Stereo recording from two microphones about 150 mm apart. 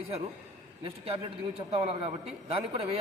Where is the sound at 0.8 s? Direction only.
40° right (ahead or behind).